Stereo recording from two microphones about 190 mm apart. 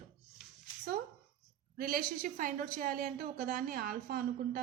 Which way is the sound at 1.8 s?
45° right (ahead or behind).